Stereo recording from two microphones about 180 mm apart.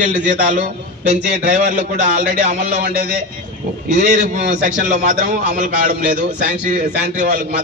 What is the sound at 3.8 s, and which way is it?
A man's voice, 40° right (ahead or behind).